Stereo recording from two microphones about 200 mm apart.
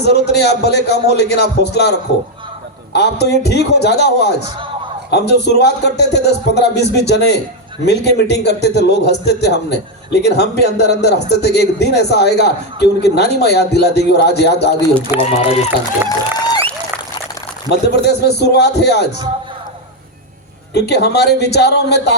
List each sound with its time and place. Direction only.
0.0 s a man's voice: 55° left (ahead or behind)
15.3 s speech: 30° left (ahead or behind)
16.0 s a sound: 20° left (ahead or behind)
17.7 s a man's voice: 55° left (ahead or behind)
20.7 s a man's voice: 55° left (ahead or behind)